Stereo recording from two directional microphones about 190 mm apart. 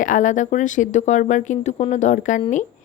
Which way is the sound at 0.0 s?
40° left (ahead or behind).